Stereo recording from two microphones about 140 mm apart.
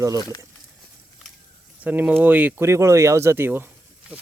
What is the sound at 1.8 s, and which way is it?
Speech, 10° right (ahead or behind).